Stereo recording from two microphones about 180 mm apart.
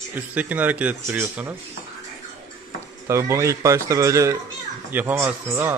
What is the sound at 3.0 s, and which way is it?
Speech, 15° right (ahead or behind).